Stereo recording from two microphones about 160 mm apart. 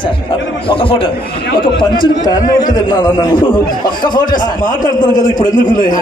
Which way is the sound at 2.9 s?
25° left (ahead or behind).